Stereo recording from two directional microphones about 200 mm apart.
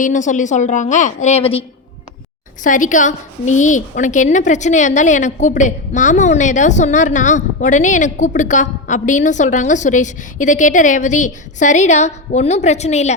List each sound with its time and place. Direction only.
0.0 s a woman's voice: 40° left (ahead or behind)
2.6 s a woman's voice: 40° left (ahead or behind)